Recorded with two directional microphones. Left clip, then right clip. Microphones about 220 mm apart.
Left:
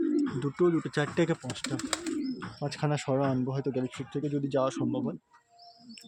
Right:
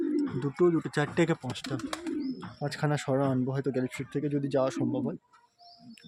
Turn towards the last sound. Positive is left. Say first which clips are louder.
# even
turn(degrees=-10)  # may be behind; listen again after turning